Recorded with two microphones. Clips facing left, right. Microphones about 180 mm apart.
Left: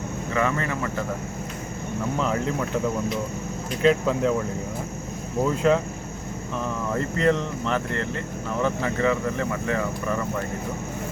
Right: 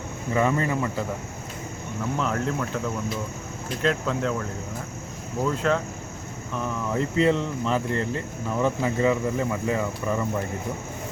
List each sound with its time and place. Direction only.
0.3 s speech: 20° right (ahead or behind)
2.1 s speech: centre (ahead or behind)
3.8 s speech: 5° left (ahead or behind)
5.7 s speech: 5° left (ahead or behind)
6.9 s speech: 5° right (ahead or behind)